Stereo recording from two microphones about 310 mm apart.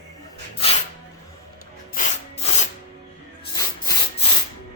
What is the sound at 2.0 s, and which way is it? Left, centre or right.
Rub, left.